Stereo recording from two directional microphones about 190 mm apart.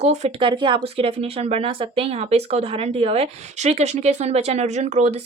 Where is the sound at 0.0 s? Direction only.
35° right (ahead or behind).